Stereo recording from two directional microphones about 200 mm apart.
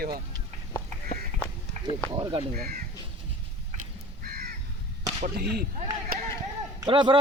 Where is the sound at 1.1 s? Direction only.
35° left (ahead or behind).